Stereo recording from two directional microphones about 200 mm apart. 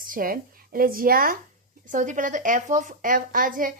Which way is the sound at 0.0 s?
45° right (ahead or behind).